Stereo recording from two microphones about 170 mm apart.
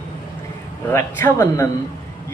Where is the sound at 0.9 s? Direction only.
15° left (ahead or behind).